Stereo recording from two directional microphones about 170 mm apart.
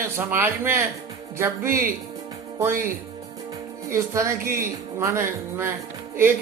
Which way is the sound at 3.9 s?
15° right (ahead or behind).